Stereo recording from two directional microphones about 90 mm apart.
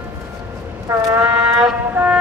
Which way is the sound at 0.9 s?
30° right (ahead or behind).